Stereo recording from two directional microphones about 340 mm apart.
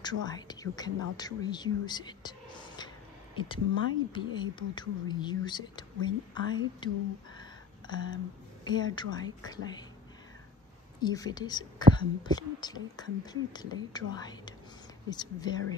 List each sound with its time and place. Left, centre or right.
0.0 s speech: centre
7.3 s a sound: centre
8.6 s speech: centre
11.0 s speech: centre